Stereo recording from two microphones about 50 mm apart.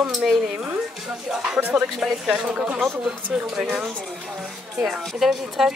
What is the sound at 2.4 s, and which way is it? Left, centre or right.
Speech, right.